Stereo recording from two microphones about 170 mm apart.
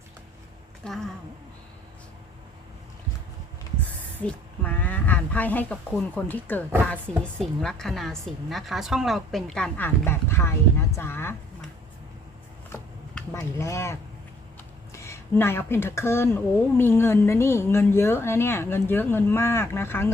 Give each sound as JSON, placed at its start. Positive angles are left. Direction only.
{"t": 0.8, "sound": "a woman's voice", "side_deg": 5}
{"t": 4.2, "sound": "a woman's voice", "side_deg": 10}
{"t": 12.7, "sound": "a sound", "side_deg": 15}
{"t": 14.9, "sound": "speech", "side_deg": 15}